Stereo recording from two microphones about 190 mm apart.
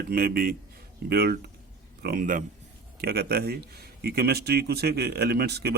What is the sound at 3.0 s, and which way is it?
Speech, 55° right (ahead or behind).